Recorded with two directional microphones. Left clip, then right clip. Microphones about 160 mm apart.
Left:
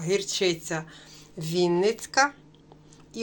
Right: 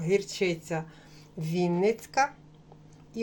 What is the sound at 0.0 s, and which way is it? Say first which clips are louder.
Speech: left 2 dB; 10° right (ahead or behind).